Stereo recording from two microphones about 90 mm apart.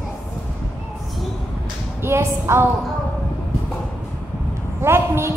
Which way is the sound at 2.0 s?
30° right (ahead or behind).